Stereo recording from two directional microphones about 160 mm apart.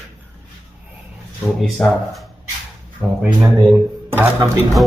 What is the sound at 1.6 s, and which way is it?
Speech, centre (ahead or behind).